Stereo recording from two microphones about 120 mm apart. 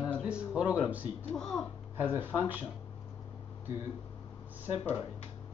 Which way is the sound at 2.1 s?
15° right (ahead or behind).